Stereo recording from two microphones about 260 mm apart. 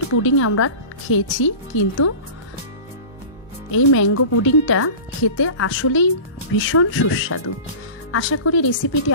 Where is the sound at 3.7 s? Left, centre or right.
Left.